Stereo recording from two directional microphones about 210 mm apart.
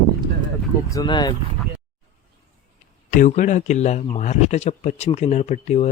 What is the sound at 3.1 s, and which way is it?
A man's voice, 35° left (ahead or behind).